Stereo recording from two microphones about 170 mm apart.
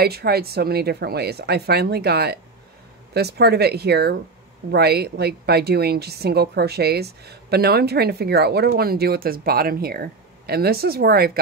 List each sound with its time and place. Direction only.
0.0 s speech: 65° right (ahead or behind)